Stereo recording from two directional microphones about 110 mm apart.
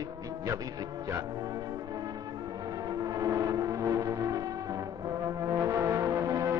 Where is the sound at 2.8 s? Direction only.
35° right (ahead or behind).